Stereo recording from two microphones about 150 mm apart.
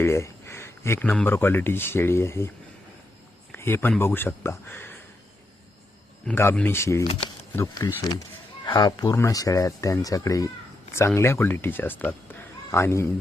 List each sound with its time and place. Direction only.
0.0 s speech: 15° left (ahead or behind)
3.5 s speech: 15° left (ahead or behind)
6.3 s speech: 15° left (ahead or behind)